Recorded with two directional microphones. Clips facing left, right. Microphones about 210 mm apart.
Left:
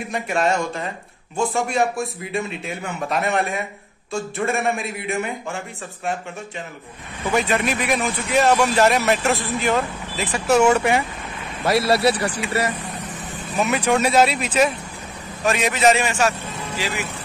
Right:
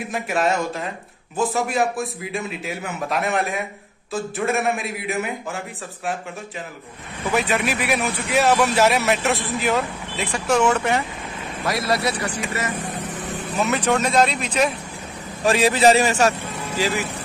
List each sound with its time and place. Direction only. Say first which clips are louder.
0.1 s a man's voice: left 1 dB; centre (ahead or behind)
7.3 s a man's voice: left 1 dB; centre (ahead or behind)
11.6 s a man's voice: left 5 dB; 30° left (ahead or behind)
13.6 s speech: left 1 dB; 10° left (ahead or behind)
15.4 s a man's voice: right 2 dB; 30° right (ahead or behind)